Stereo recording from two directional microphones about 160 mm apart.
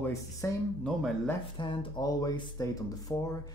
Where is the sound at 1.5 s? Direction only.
30° left (ahead or behind).